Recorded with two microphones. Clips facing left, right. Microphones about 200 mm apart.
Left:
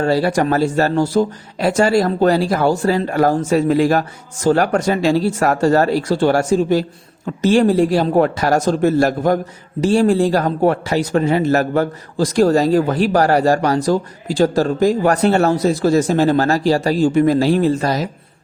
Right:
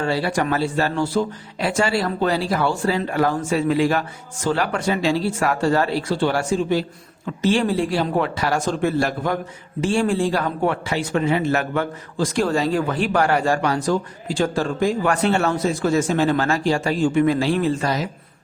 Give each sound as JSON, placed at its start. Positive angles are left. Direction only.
{"t": 0.0, "sound": "speech", "side_deg": 40}